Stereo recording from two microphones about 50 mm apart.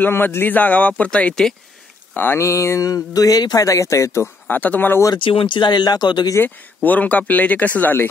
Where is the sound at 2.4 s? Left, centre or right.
Left.